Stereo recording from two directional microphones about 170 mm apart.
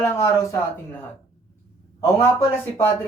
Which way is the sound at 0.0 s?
15° left (ahead or behind).